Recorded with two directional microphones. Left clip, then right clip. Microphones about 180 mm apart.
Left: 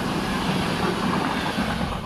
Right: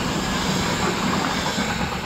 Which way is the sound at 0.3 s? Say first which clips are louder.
Right 2 dB; 60° right (ahead or behind).